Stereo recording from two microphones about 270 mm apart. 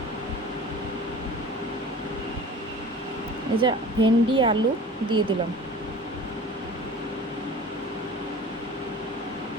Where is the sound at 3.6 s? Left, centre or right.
Centre.